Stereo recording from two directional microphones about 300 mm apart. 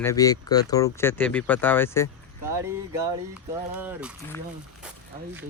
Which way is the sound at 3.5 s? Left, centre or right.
Centre.